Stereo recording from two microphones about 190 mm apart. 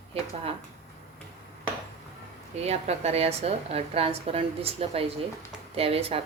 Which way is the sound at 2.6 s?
35° right (ahead or behind).